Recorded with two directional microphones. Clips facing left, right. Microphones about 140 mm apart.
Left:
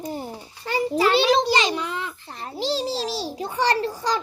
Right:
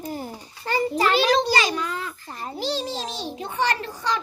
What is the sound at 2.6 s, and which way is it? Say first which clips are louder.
Speech: left 3 dB; 30° left (ahead or behind).